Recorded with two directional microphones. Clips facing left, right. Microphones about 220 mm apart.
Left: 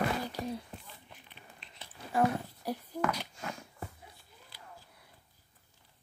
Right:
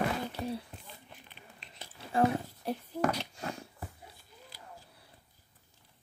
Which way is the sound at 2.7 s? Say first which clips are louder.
Right 2 dB; 35° right (ahead or behind).